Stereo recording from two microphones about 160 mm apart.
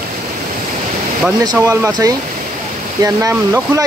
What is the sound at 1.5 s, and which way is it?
Speech, 15° right (ahead or behind).